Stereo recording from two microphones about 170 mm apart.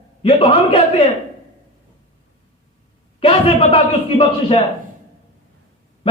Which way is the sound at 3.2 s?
35° left (ahead or behind).